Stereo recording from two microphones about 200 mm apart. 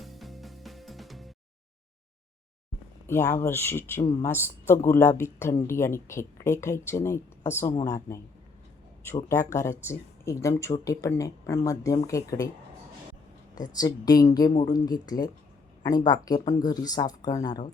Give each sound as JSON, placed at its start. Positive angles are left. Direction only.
{"t": 0.0, "sound": "music", "side_deg": 0}
{"t": 3.1, "sound": "speech", "side_deg": 15}
{"t": 9.3, "sound": "speech", "side_deg": 15}
{"t": 13.6, "sound": "speech", "side_deg": 20}